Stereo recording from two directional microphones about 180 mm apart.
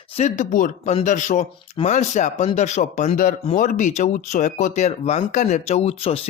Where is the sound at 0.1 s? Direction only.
40° left (ahead or behind).